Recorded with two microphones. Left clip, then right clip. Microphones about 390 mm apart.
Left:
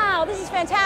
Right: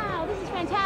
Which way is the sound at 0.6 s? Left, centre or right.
Centre.